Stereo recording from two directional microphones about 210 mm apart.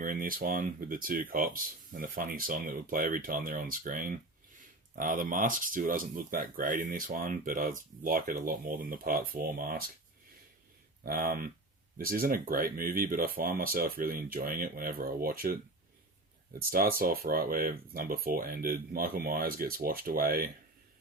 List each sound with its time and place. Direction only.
0.0 s speech: 40° right (ahead or behind)
11.0 s speech: 45° right (ahead or behind)